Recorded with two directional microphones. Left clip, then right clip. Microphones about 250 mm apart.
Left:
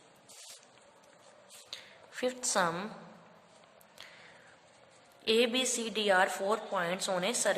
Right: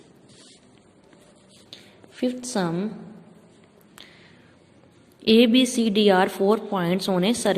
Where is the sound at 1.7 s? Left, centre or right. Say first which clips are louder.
Even; centre.